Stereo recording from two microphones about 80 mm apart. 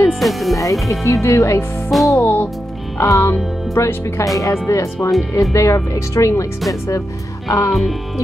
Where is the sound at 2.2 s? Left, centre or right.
Left.